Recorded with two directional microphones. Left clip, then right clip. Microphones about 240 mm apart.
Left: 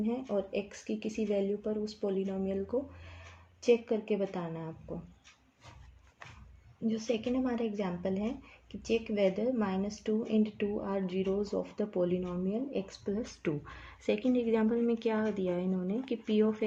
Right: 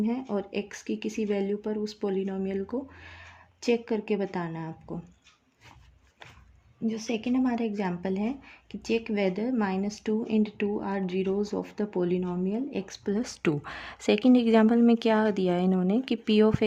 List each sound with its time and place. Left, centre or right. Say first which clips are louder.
0.0 s speech: right 3 dB; right
6.8 s speech: right 2 dB; right